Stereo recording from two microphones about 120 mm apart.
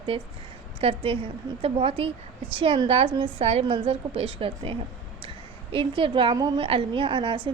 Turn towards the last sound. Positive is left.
turn(degrees=-45)  # may be behind; listen again after turning